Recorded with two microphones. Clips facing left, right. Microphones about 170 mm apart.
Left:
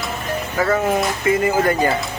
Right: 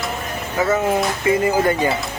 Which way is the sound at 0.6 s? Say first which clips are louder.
Even; centre (ahead or behind).